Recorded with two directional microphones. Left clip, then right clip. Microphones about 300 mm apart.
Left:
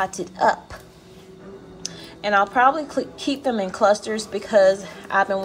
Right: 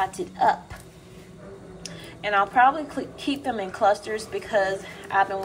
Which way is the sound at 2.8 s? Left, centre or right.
Left.